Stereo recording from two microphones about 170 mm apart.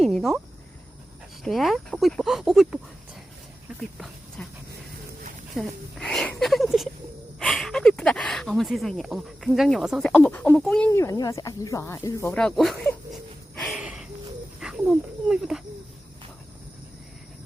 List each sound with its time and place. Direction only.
0.0 s cricket: centre (ahead or behind)
1.5 s speech: centre (ahead or behind)
3.8 s speech: centre (ahead or behind)
5.5 s speech: 5° left (ahead or behind)
10.9 s speech: 20° left (ahead or behind)
12.3 s speech: 5° left (ahead or behind)
13.6 s a sound: 5° right (ahead or behind)
14.6 s speech: 5° right (ahead or behind)